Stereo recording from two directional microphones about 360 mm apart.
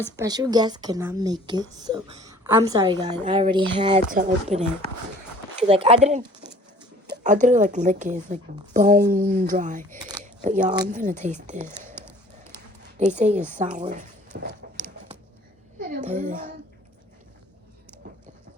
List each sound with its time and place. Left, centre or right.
0.2 s speech: centre
13.1 s speech: centre
15.8 s a woman's voice: right